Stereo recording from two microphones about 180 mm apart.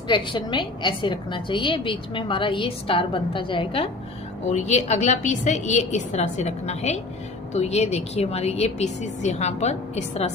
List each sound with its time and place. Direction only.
0.1 s a woman's voice: 25° left (ahead or behind)